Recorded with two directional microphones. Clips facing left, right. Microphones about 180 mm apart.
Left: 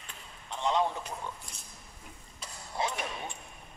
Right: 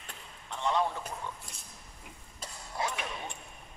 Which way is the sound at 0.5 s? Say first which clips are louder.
Left 1 dB; 20° left (ahead or behind).